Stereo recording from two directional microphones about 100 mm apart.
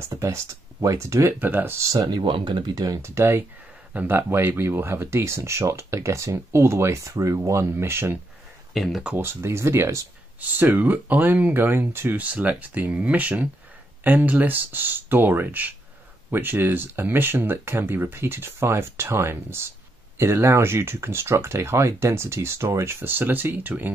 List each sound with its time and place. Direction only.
0.0 s speech: 30° right (ahead or behind)
2.0 s speech: 50° right (ahead or behind)
3.2 s speech: 25° right (ahead or behind)
8.7 s speech: centre (ahead or behind)
9.1 s speech: 25° right (ahead or behind)
10.4 s speech: 20° right (ahead or behind)